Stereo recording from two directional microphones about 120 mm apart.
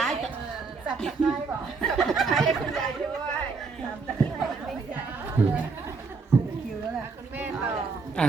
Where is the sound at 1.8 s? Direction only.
Centre (ahead or behind).